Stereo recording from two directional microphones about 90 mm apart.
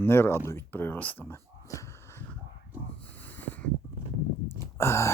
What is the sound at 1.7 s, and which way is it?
Wheeze, 40° left (ahead or behind).